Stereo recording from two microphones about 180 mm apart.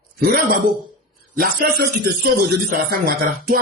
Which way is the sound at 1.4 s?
55° right (ahead or behind).